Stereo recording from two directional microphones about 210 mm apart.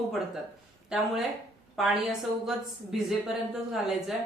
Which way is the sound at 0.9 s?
5° right (ahead or behind).